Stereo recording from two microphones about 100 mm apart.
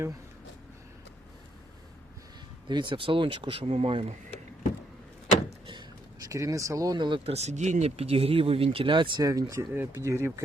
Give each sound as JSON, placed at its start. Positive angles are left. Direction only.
{"t": 2.6, "sound": "speech", "side_deg": -50}
{"t": 6.2, "sound": "speech", "side_deg": -30}
{"t": 7.3, "sound": "speech", "side_deg": -90}
{"t": 9.2, "sound": "speech", "side_deg": -35}
{"t": 9.7, "sound": "speech", "side_deg": -20}